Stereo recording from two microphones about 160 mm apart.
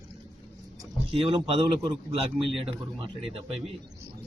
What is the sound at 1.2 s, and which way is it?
A man's voice, 30° right (ahead or behind).